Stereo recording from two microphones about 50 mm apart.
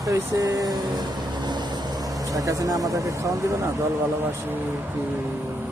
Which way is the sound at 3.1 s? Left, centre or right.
Right.